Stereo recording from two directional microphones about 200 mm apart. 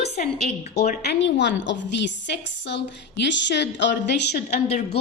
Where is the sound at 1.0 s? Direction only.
60° left (ahead or behind).